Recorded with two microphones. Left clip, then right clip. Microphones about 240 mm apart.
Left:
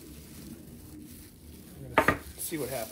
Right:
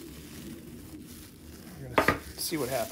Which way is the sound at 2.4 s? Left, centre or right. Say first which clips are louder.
Right 3 dB; right.